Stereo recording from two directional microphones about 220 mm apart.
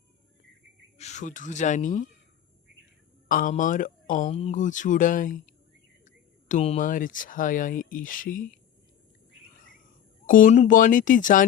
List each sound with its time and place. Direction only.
0.9 s speech: 30° left (ahead or behind)
3.2 s speech: 40° left (ahead or behind)
10.2 s speech: 35° left (ahead or behind)